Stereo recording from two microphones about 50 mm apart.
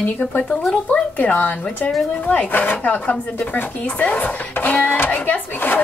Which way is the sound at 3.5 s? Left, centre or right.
Left.